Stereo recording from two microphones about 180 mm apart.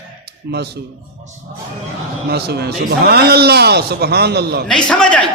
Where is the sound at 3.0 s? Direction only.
60° right (ahead or behind).